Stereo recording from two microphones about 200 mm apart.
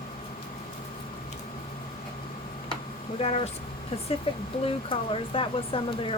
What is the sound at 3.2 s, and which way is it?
Speech, 30° left (ahead or behind).